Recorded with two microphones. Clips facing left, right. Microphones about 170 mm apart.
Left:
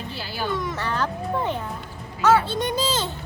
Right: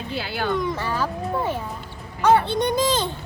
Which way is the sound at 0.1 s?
60° right (ahead or behind).